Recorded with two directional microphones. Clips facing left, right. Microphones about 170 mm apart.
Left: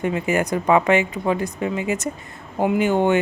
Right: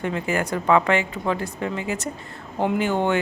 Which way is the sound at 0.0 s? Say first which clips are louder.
Left 3 dB; 15° left (ahead or behind).